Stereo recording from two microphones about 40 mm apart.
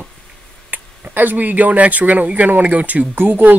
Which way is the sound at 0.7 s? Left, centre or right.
Right.